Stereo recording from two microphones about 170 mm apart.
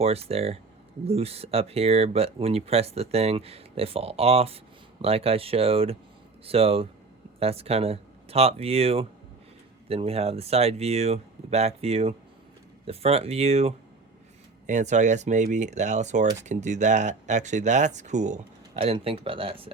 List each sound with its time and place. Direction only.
0.0 s speech: 35° right (ahead or behind)
18.8 s speech: 35° right (ahead or behind)